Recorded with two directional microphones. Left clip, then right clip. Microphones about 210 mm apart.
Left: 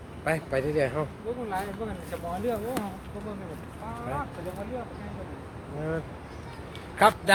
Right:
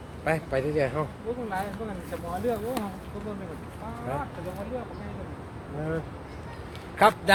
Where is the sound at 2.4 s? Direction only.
30° left (ahead or behind).